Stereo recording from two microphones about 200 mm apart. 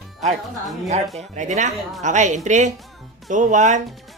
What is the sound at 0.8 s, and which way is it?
A woman's voice, 35° right (ahead or behind).